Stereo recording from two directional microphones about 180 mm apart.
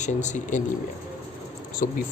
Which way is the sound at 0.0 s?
40° left (ahead or behind).